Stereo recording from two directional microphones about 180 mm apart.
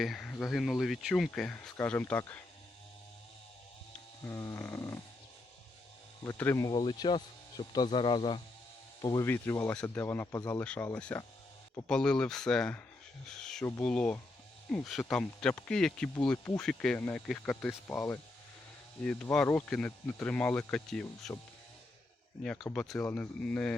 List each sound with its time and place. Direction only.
0.0 s speech: centre (ahead or behind)
4.2 s speech: 15° left (ahead or behind)
6.2 s speech: 10° left (ahead or behind)
22.7 s speech: 5° left (ahead or behind)